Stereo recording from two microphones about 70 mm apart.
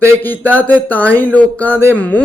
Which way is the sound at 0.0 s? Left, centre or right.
Left.